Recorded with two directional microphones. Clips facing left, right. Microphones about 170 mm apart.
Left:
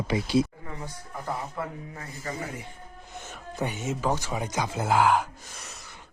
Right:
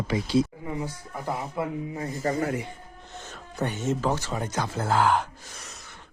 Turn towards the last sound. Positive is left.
turn(degrees=5)  # may be behind; listen again after turning